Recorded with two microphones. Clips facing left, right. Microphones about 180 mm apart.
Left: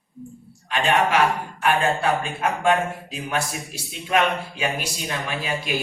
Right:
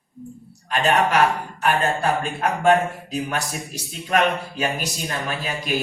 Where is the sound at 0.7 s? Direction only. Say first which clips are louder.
Right 1 dB; 40° right (ahead or behind).